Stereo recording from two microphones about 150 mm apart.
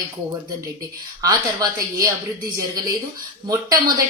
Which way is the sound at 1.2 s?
25° right (ahead or behind).